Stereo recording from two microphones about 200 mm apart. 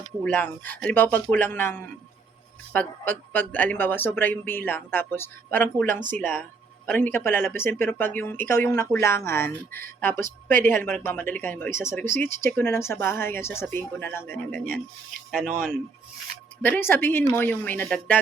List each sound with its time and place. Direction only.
0.3 s speech: 10° left (ahead or behind)
15.4 s speech: 40° right (ahead or behind)
16.6 s speech: 10° left (ahead or behind)